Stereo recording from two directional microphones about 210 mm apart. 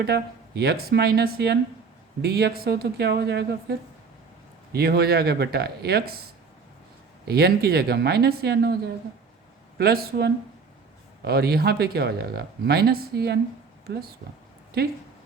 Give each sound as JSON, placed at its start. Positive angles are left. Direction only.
{"t": 0.0, "sound": "speech", "side_deg": -50}
{"t": 7.3, "sound": "speech", "side_deg": -50}
{"t": 9.7, "sound": "speech", "side_deg": -50}